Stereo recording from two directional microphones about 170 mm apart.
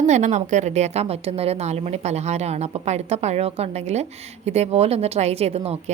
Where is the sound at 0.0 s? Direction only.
40° right (ahead or behind).